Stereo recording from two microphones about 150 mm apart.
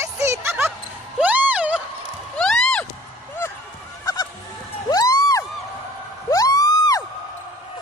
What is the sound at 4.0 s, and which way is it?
Goose, 25° left (ahead or behind).